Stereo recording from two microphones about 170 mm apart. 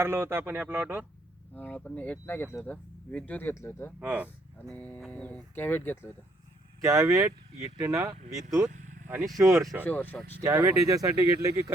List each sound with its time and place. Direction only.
0.0 s speech: 15° right (ahead or behind)
1.5 s speech: 10° left (ahead or behind)
4.0 s speech: 10° right (ahead or behind)
4.7 s speech: 10° left (ahead or behind)
6.8 s speech: 15° right (ahead or behind)
8.7 s vehicle: 45° right (ahead or behind)
9.0 s speech: 15° right (ahead or behind)
9.8 s speech: 10° left (ahead or behind)
10.4 s speech: 15° right (ahead or behind)